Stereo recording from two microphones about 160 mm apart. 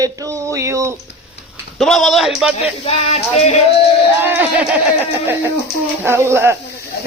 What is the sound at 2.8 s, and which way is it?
Music, 40° left (ahead or behind).